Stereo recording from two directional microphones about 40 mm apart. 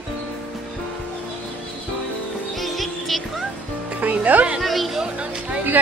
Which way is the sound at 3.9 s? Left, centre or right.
Right.